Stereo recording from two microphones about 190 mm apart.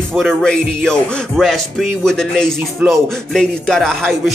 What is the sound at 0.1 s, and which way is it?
Speech, centre (ahead or behind).